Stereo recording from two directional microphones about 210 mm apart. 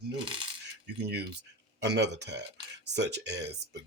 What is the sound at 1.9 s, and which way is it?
Speech, 55° right (ahead or behind).